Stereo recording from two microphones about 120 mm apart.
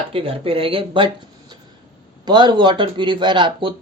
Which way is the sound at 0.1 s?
50° right (ahead or behind).